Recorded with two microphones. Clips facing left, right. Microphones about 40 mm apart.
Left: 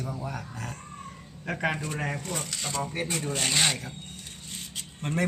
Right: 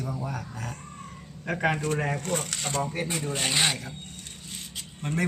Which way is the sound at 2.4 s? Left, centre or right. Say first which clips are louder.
Right 2 dB; right.